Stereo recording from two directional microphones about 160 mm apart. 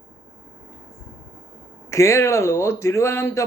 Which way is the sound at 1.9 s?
20° left (ahead or behind).